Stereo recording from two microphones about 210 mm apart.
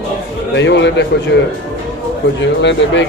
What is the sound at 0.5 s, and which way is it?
Speech, 55° left (ahead or behind).